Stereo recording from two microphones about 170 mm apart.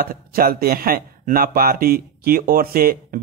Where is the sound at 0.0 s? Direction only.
60° right (ahead or behind).